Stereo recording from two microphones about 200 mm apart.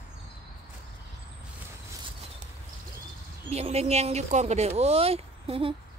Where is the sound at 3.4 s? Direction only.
30° right (ahead or behind).